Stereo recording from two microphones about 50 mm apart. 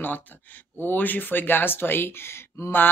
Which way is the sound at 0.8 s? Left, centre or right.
Left.